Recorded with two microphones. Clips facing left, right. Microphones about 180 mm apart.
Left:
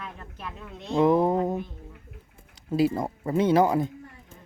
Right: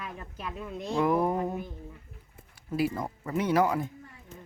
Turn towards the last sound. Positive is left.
turn(degrees=25)  # may be behind; listen again after turning